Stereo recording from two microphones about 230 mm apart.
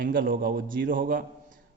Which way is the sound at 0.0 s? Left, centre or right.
Right.